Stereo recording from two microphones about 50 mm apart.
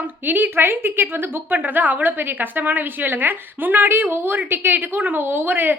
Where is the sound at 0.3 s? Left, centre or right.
Right.